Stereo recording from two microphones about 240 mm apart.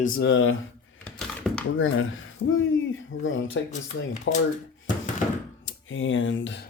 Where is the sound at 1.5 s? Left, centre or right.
Centre.